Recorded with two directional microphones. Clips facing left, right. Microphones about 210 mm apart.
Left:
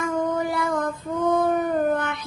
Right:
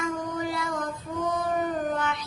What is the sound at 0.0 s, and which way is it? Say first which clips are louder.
Child singing: left 5 dB; 55° left (ahead or behind).